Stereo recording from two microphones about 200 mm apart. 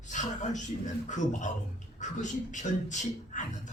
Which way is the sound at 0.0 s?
40° left (ahead or behind).